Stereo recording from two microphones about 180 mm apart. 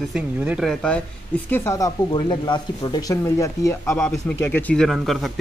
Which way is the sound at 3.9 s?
5° left (ahead or behind).